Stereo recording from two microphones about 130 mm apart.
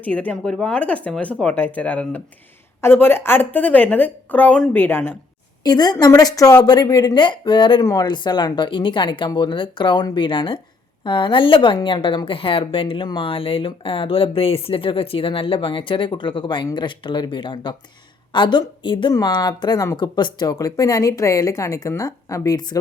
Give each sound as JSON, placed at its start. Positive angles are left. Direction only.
{"t": 0.0, "sound": "a woman's voice", "side_deg": 10}
{"t": 5.6, "sound": "a woman's voice", "side_deg": 30}